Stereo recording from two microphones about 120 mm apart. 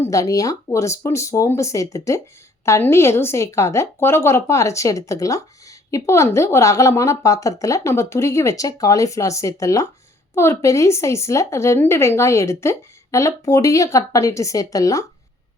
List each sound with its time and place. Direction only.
0.0 s a woman's voice: 25° left (ahead or behind)